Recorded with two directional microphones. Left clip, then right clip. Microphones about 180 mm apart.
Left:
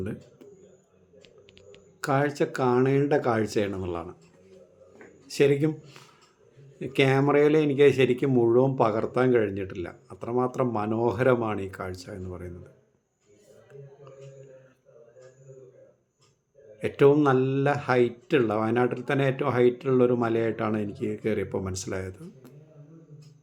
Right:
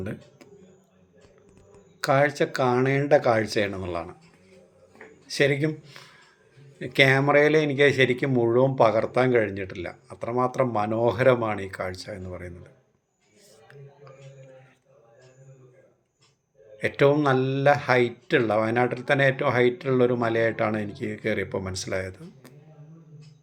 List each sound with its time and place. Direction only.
0.0 s speech: 5° left (ahead or behind)
2.0 s a man's voice: 10° left (ahead or behind)
5.3 s a man's voice: 15° left (ahead or behind)
16.8 s a man's voice: 10° left (ahead or behind)